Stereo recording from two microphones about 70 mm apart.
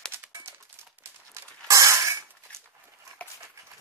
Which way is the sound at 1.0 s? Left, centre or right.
Right.